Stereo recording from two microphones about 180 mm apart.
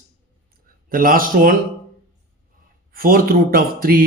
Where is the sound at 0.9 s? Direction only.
50° right (ahead or behind).